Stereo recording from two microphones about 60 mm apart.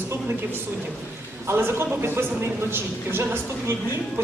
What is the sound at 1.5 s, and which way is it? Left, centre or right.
Speech, right.